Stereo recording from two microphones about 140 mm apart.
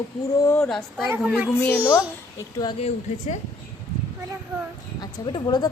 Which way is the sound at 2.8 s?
55° left (ahead or behind).